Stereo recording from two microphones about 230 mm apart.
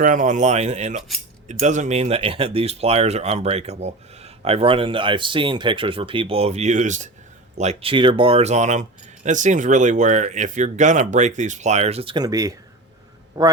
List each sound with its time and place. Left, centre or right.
0.0 s a man's voice: right; by 13.5 s centre